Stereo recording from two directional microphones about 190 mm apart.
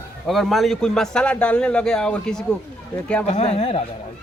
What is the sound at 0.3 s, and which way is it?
A man's voice, centre (ahead or behind).